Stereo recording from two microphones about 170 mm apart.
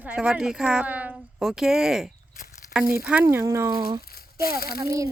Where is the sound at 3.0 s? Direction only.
10° right (ahead or behind).